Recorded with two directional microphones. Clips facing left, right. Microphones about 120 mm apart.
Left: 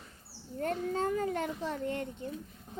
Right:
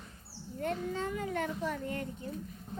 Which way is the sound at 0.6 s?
40° left (ahead or behind).